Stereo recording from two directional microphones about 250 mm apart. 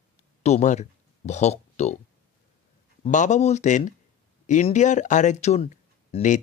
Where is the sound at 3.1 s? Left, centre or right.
Left.